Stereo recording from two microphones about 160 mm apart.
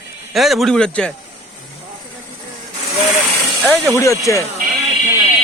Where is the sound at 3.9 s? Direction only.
20° left (ahead or behind).